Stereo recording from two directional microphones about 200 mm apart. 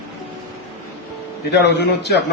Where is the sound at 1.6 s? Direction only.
55° left (ahead or behind).